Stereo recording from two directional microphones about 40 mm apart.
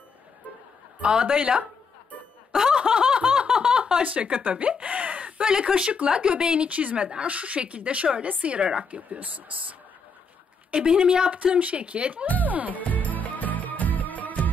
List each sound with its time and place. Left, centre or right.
1.0 s speech: right
2.5 s snicker: centre
4.0 s speech: right
5.4 s speech: centre
10.7 s speech: right
11.3 s speech: right
12.4 s music: right
12.7 s music: left